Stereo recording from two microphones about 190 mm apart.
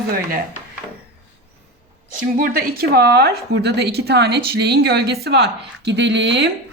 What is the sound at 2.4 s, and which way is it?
A woman's voice, 50° right (ahead or behind).